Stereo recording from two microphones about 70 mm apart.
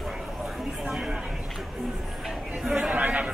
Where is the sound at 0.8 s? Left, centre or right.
Centre.